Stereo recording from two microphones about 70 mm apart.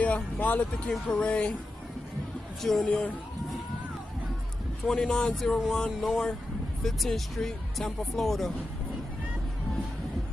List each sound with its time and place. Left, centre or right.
0.0 s speech: left
2.6 s speech: centre
4.8 s speech: centre